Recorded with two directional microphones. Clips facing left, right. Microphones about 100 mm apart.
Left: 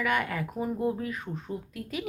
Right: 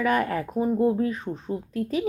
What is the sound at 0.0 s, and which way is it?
Speech, 35° right (ahead or behind).